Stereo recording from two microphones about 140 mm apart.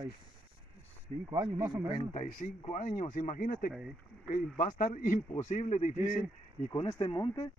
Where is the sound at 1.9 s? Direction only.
45° left (ahead or behind).